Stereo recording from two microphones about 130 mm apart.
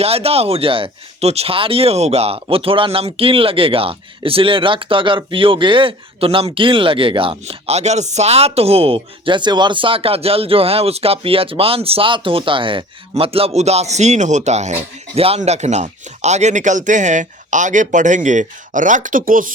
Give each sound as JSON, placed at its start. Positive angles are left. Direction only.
{"t": 0.0, "sound": "speech", "side_deg": -50}
{"t": 15.1, "sound": "speech", "side_deg": -50}
{"t": 15.4, "sound": "speech", "side_deg": -60}